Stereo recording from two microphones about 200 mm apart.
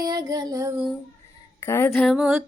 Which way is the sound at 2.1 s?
5° right (ahead or behind).